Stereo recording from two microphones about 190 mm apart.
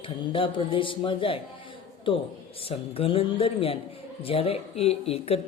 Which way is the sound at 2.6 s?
30° left (ahead or behind).